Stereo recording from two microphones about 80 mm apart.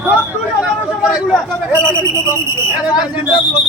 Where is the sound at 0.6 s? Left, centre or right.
Centre.